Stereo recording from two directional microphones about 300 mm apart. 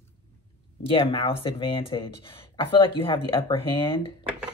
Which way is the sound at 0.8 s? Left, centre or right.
Centre.